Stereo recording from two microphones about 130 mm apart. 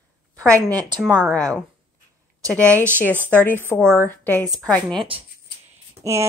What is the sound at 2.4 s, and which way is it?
Speech, 25° right (ahead or behind).